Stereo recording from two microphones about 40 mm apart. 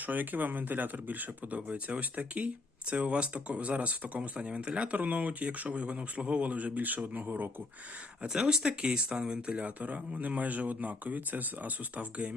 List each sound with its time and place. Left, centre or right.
0.0 s speech: right
1.5 s speech: right
8.3 s speech: centre
9.6 s speech: right